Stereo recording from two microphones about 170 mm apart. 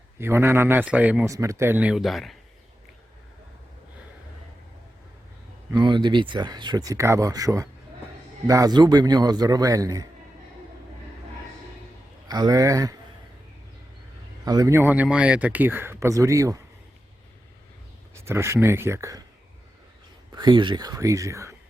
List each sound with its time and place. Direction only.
0.2 s speech: 15° right (ahead or behind)
5.7 s speech: 25° right (ahead or behind)
12.3 s speech: 20° right (ahead or behind)
14.4 s speech: 20° right (ahead or behind)
18.3 s speech: 15° right (ahead or behind)
20.3 s speech: 25° right (ahead or behind)